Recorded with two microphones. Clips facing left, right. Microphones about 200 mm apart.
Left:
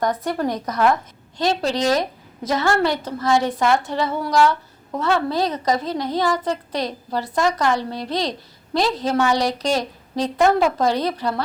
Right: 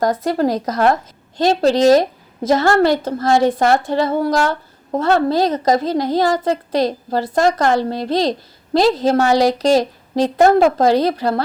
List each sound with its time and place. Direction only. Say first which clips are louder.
0.0 s a woman's voice: right 5 dB; 35° right (ahead or behind)
1.4 s a woman's voice: right 7 dB; 45° right (ahead or behind)
7.7 s a woman's voice: right 5 dB; 35° right (ahead or behind)